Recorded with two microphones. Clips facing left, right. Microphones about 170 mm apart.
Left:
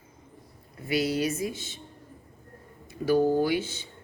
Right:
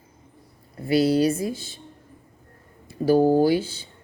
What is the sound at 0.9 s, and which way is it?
Speech, 35° right (ahead or behind).